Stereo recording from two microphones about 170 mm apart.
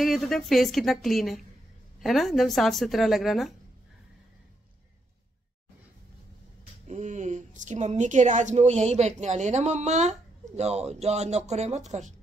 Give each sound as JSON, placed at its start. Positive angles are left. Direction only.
{"t": 0.0, "sound": "speech", "side_deg": 0}
{"t": 6.9, "sound": "speech", "side_deg": -45}